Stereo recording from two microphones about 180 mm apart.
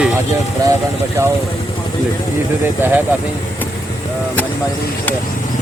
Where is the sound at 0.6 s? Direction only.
20° right (ahead or behind).